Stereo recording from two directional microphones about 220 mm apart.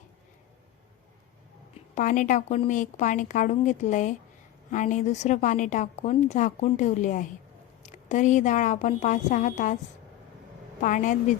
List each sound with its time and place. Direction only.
2.0 s a woman's voice: 35° left (ahead or behind)
10.8 s a woman's voice: 35° left (ahead or behind)